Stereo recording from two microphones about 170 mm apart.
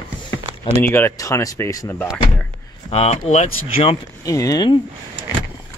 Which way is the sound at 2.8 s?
35° left (ahead or behind).